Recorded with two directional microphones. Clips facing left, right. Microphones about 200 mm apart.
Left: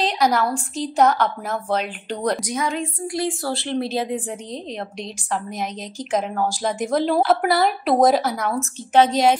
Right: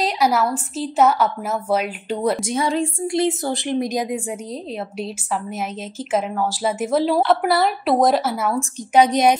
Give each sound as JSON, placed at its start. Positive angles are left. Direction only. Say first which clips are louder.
{"t": 0.0, "sound": "a woman's voice", "louder": "right 1 dB", "side_deg": -5}
{"t": 2.4, "sound": "a woman's voice", "louder": "right 4 dB", "side_deg": -30}